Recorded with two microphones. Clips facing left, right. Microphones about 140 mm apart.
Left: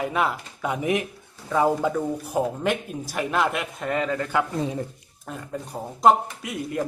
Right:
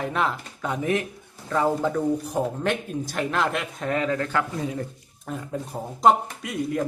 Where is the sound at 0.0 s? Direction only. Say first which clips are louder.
Left 1 dB; 5° left (ahead or behind).